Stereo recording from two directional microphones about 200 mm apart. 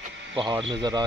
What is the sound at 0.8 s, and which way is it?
Speech, 20° right (ahead or behind).